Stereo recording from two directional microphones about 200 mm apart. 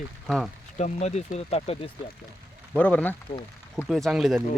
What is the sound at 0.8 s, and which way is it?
Speech, 35° left (ahead or behind).